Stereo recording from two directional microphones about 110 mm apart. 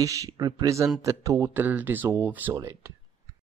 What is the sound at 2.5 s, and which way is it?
Speech, 30° right (ahead or behind).